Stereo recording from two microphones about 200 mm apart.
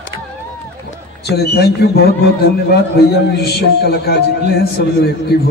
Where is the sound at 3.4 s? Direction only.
50° left (ahead or behind).